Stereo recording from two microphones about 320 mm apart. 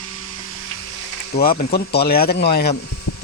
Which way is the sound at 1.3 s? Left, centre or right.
Left.